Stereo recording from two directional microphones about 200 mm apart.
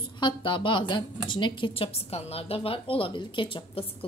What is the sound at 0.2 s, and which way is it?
A woman's voice, 25° left (ahead or behind).